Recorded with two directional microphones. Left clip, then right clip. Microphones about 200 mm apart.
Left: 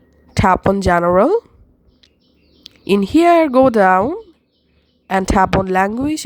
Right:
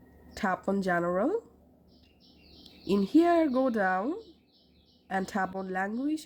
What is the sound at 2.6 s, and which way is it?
A woman's voice, 40° left (ahead or behind).